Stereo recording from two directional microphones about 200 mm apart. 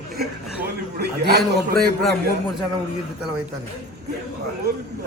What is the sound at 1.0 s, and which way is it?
Speech, 55° right (ahead or behind).